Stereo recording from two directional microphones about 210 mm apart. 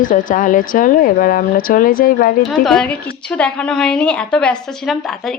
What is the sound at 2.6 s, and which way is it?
A woman's voice, 5° left (ahead or behind).